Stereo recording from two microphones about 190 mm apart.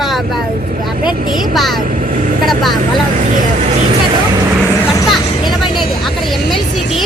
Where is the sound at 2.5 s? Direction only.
Centre (ahead or behind).